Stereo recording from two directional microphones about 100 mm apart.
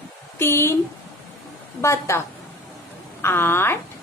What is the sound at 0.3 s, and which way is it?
Speech, 25° left (ahead or behind).